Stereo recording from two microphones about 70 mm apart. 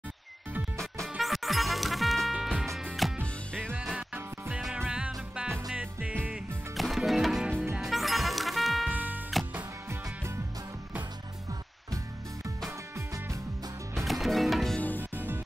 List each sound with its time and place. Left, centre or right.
1.1 s music: centre
4.8 s music: centre
6.8 s music: centre
8.8 s music: right
13.9 s music: centre
14.8 s music: left